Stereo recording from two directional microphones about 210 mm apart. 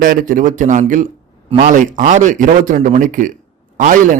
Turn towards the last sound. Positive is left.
turn(degrees=-40)  # may be behind; listen again after turning